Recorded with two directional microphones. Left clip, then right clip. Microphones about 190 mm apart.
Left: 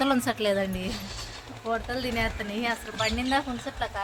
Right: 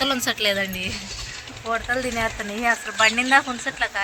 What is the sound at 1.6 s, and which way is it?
Speech, 30° right (ahead or behind).